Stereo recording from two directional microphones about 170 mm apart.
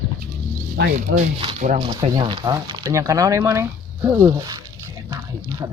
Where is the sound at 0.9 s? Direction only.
40° right (ahead or behind).